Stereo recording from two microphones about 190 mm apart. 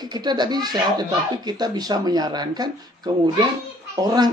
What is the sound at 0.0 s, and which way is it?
Speech, 20° right (ahead or behind).